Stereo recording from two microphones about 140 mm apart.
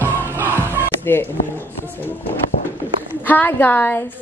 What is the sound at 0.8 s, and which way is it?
Music, 15° left (ahead or behind).